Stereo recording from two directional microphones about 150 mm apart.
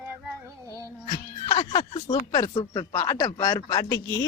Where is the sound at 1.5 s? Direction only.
40° left (ahead or behind).